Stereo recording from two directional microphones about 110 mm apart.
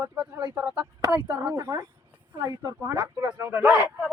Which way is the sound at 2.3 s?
35° right (ahead or behind).